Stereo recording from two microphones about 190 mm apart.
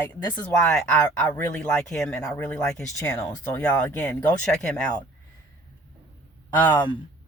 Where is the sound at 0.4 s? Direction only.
5° left (ahead or behind).